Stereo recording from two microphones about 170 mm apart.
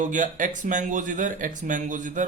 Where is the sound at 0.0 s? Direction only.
50° right (ahead or behind).